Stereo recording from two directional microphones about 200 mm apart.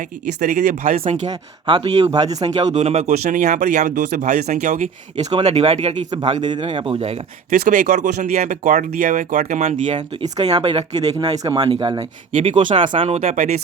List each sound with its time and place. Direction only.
0.4 s speech: 45° right (ahead or behind)
1.0 s speech: 25° right (ahead or behind)
2.4 s speech: 30° right (ahead or behind)
6.1 s speech: 20° right (ahead or behind); by 13.5 s 35° right (ahead or behind)